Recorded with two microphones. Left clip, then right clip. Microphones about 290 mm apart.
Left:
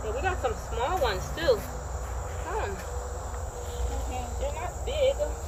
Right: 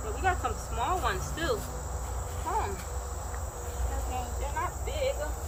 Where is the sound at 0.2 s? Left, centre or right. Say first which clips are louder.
Right 1 dB; centre.